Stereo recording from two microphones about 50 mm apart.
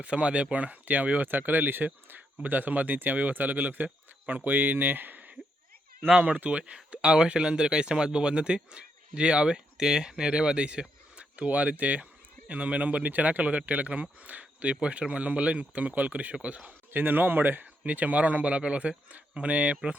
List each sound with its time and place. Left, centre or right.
0.0 s speech: right
16.6 s speech: right